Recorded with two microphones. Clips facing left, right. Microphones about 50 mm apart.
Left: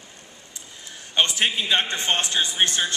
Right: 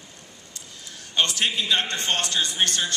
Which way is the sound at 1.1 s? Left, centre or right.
Centre.